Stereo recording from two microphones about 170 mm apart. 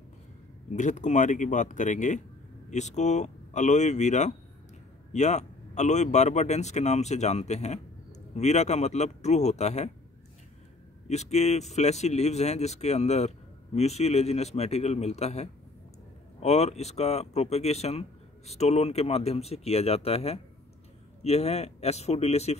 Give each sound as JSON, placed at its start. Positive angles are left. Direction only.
{"t": 0.7, "sound": "speech", "side_deg": 45}
{"t": 11.1, "sound": "speech", "side_deg": 40}